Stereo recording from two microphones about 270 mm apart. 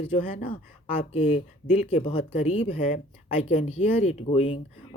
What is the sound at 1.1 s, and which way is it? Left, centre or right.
Speech, left.